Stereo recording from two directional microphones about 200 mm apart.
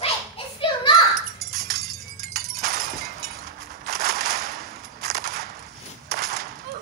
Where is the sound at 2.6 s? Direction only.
50° right (ahead or behind).